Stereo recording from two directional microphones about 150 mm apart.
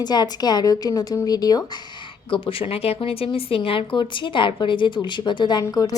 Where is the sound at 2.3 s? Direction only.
35° left (ahead or behind).